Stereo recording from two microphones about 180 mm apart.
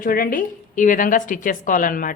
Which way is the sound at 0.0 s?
50° left (ahead or behind).